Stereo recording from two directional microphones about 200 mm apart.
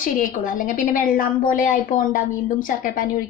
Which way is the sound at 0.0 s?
40° left (ahead or behind).